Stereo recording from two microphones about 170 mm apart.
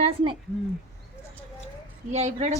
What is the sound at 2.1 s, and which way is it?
Speech, 40° right (ahead or behind).